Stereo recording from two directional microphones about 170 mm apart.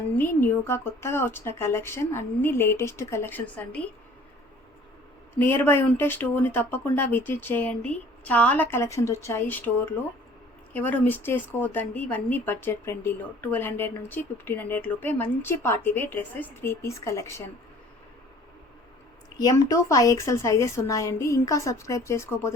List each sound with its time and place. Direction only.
0.2 s a woman's voice: 10° left (ahead or behind)
5.4 s a woman's voice: 10° left (ahead or behind)
10.8 s a woman's voice: 10° left (ahead or behind)
19.4 s a woman's voice: 20° left (ahead or behind)